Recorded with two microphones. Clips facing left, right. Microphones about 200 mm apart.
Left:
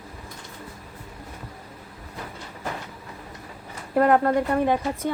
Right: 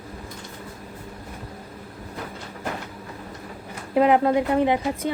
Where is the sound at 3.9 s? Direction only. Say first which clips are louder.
Right 1 dB; 20° right (ahead or behind).